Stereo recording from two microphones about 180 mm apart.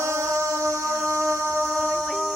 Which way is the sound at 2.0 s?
Centre (ahead or behind).